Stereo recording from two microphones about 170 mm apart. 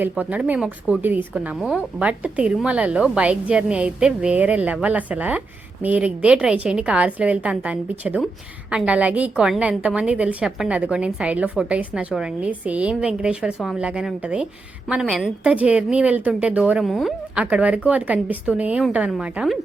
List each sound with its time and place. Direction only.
0.0 s a woman's voice: 10° right (ahead or behind)